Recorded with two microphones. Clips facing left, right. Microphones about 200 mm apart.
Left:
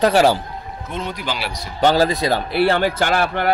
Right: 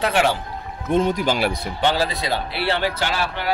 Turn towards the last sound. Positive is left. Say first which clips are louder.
# left 6 dB
turn(degrees=55)  # may be behind; listen again after turning